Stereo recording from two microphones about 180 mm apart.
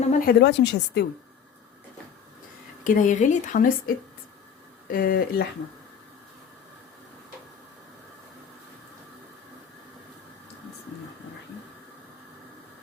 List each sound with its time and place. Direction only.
0.1 s a woman's voice: 50° left (ahead or behind); by 1.0 s 70° left (ahead or behind)
2.8 s a woman's voice: 45° left (ahead or behind)